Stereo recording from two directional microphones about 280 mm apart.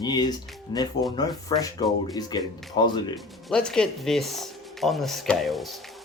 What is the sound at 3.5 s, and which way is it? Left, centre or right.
Speech, centre.